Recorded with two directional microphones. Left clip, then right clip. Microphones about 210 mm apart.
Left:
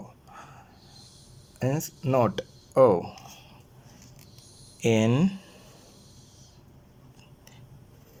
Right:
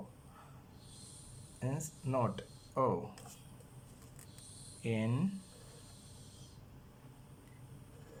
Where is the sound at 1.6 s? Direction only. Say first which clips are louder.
Left 13 dB; 45° left (ahead or behind).